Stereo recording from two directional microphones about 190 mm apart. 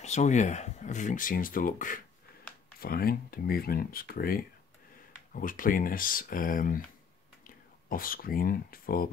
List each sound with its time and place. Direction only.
0.0 s speech: 35° left (ahead or behind)